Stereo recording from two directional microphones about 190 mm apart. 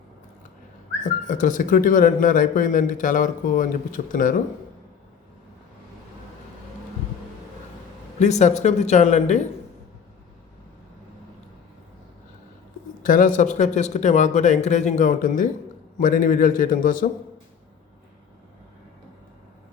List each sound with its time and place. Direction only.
1.0 s speech: 40° left (ahead or behind)
8.2 s speech: 35° left (ahead or behind)
13.0 s speech: 45° left (ahead or behind)